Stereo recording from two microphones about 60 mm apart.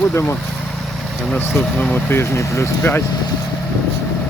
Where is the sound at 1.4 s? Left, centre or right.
Left.